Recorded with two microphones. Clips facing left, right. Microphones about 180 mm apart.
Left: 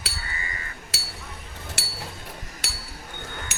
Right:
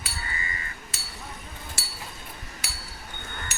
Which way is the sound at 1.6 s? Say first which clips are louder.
Left 6 dB; 70° left (ahead or behind).